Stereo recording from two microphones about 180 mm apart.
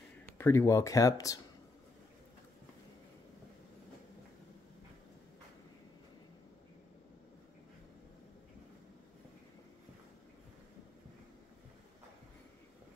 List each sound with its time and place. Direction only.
0.3 s speech: 15° left (ahead or behind)